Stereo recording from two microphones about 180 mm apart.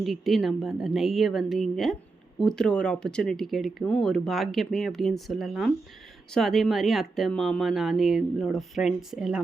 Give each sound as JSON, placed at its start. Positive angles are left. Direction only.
{"t": 0.0, "sound": "speech", "side_deg": 0}